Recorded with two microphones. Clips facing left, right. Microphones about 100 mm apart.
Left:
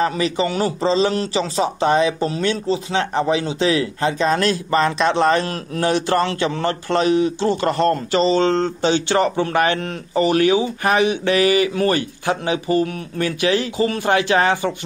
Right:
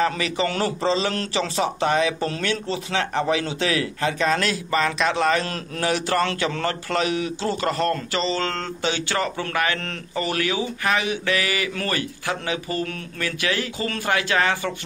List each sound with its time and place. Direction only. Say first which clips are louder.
0.0 s speech: left 3 dB; 30° left (ahead or behind)